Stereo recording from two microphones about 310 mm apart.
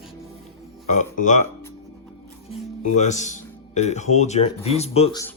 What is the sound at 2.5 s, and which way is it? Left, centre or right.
Speech, left.